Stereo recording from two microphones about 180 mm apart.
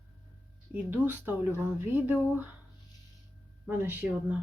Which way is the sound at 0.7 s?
10° right (ahead or behind).